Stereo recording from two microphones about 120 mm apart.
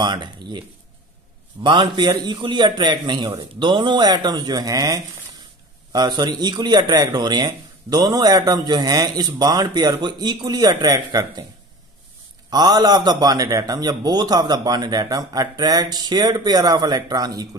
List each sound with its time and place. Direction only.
0.0 s a man's voice: 35° right (ahead or behind)
12.4 s a man's voice: 35° right (ahead or behind)